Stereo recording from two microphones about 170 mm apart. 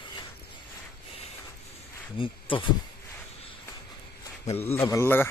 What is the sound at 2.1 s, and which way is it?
Speech, 30° left (ahead or behind).